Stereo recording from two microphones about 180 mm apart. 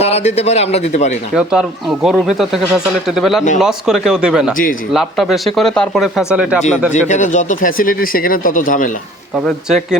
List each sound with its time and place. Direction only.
0.0 s speech: 35° left (ahead or behind)
1.4 s speech: 5° right (ahead or behind)
7.1 s speech: 45° left (ahead or behind)
9.6 s speech: 5° right (ahead or behind)